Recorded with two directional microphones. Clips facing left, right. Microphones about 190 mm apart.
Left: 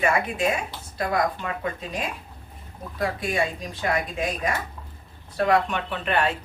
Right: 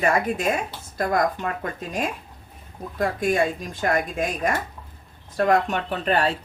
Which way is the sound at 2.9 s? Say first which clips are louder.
Right 4 dB; 50° right (ahead or behind).